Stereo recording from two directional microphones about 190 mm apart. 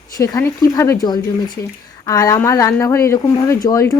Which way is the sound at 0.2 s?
15° left (ahead or behind).